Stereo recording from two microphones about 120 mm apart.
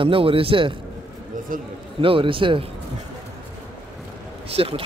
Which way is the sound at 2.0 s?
45° right (ahead or behind).